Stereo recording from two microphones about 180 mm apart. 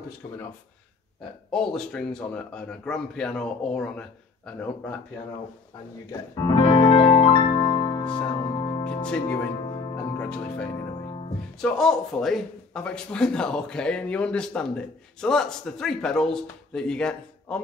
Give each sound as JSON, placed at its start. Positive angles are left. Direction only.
{"t": 1.5, "sound": "speech", "side_deg": 5}
{"t": 6.1, "sound": "music", "side_deg": 20}
{"t": 9.0, "sound": "speech", "side_deg": 5}